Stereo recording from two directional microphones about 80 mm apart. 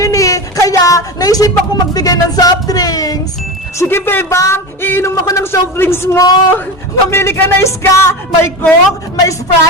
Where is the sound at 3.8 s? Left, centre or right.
Left.